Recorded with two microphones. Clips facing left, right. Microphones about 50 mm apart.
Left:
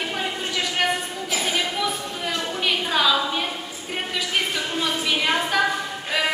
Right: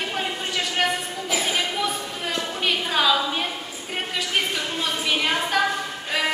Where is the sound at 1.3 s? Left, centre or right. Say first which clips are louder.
Even; centre.